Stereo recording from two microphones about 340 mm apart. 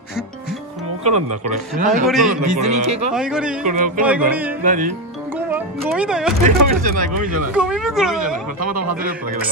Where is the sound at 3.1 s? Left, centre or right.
Centre.